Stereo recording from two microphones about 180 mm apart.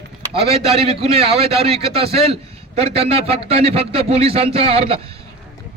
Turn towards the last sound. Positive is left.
turn(degrees=-30)  # may be behind; listen again after turning